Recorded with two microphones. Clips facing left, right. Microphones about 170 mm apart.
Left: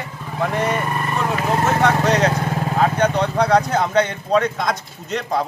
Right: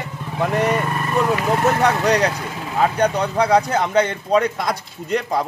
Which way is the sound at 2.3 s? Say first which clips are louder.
Left 6 dB; 50° left (ahead or behind).